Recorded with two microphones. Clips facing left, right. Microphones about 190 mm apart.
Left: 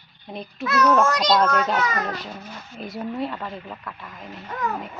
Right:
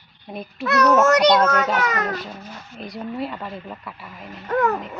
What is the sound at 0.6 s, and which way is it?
Speech, 65° right (ahead or behind).